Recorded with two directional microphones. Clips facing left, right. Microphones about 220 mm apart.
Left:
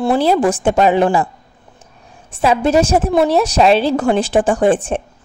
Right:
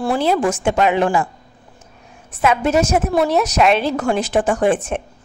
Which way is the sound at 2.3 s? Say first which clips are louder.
Left 3 dB; 30° left (ahead or behind).